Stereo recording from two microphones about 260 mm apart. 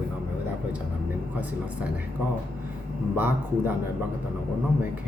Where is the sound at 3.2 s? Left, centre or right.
Centre.